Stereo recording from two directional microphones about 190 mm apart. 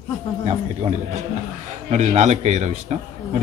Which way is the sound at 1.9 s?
35° right (ahead or behind).